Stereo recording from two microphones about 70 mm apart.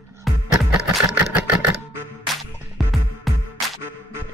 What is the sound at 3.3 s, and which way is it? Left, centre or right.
Music, centre.